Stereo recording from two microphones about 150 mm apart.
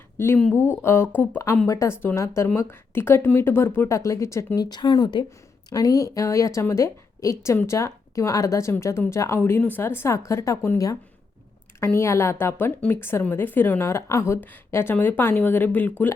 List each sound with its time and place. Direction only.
0.7 s a woman's voice: 15° left (ahead or behind)
11.9 s a woman's voice: 20° left (ahead or behind)